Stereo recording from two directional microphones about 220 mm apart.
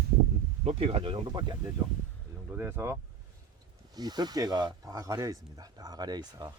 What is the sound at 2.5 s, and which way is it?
Speech, 10° right (ahead or behind).